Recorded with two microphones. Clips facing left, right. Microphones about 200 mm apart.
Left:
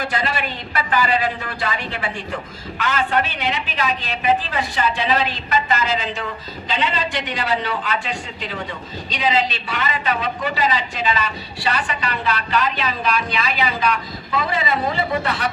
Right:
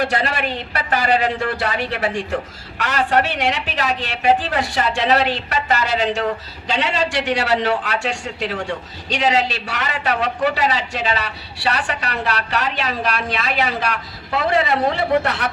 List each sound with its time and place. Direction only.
0.0 s a man's voice: 70° right (ahead or behind)